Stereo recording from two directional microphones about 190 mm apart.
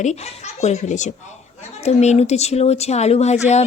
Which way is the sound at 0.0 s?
35° left (ahead or behind).